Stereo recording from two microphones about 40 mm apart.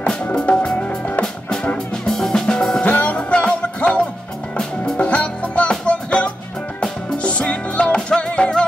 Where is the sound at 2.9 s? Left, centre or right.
Left.